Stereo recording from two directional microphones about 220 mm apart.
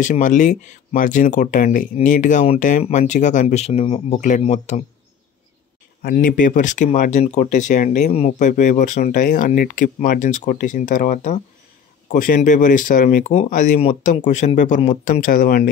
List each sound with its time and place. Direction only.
0.0 s speech: 35° left (ahead or behind)
6.0 s speech: 35° left (ahead or behind)